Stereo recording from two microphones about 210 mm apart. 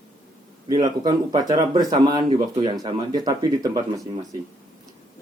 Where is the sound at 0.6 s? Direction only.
20° right (ahead or behind).